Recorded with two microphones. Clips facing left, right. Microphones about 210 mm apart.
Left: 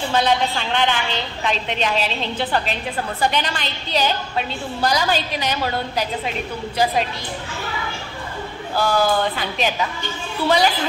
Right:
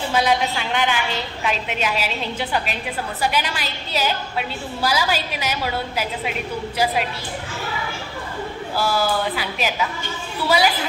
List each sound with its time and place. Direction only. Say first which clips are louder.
0.1 s a woman's voice: left 1 dB; 10° right (ahead or behind)
8.7 s a woman's voice: left 3 dB; 5° right (ahead or behind)